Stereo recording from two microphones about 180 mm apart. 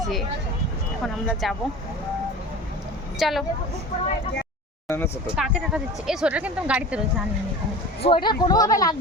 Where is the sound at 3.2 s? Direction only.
Centre (ahead or behind).